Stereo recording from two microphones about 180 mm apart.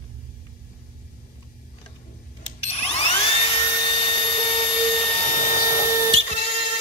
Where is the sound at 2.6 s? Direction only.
35° left (ahead or behind).